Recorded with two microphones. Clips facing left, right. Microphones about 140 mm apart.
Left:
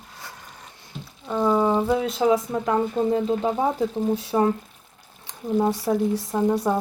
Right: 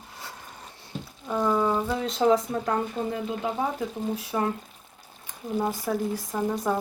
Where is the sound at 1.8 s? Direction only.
15° left (ahead or behind).